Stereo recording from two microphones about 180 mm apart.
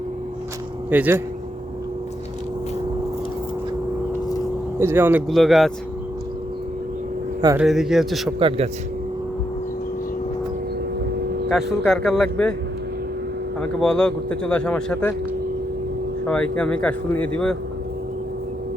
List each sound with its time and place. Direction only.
0.9 s speech: 10° right (ahead or behind)
4.8 s speech: 15° right (ahead or behind)
5.3 s speech: centre (ahead or behind)
7.5 s speech: 5° right (ahead or behind)
8.4 s speech: 30° right (ahead or behind)
11.9 s speech: centre (ahead or behind)
13.6 s speech: 5° left (ahead or behind)
16.2 s speech: 5° left (ahead or behind)